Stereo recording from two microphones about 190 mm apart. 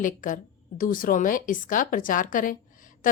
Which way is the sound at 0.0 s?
45° left (ahead or behind).